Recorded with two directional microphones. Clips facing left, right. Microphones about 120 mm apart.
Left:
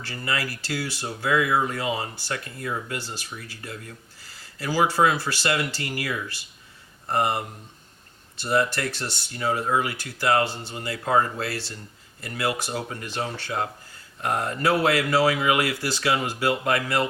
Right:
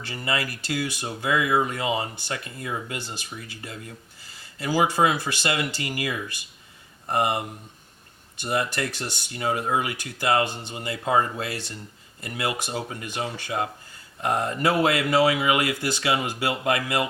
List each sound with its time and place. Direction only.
0.0 s speech: 20° right (ahead or behind)
8.7 s speech: 15° right (ahead or behind)